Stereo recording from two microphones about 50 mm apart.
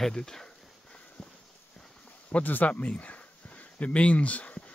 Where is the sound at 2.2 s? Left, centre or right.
Left.